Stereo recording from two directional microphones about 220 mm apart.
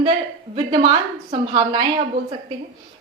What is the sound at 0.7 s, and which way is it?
A woman's voice, 20° right (ahead or behind).